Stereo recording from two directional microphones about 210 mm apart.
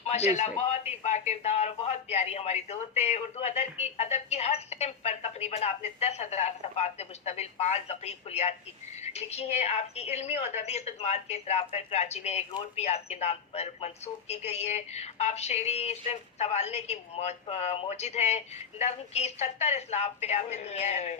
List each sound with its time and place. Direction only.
0.0 s a man's voice: 30° left (ahead or behind)